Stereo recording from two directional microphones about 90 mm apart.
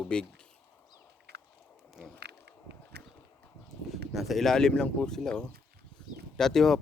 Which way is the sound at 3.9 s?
Centre (ahead or behind).